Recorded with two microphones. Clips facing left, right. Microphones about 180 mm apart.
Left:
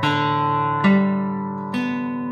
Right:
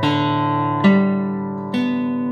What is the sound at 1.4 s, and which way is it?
Music, 25° right (ahead or behind).